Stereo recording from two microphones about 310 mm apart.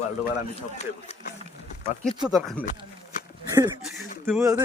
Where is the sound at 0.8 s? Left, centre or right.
Left.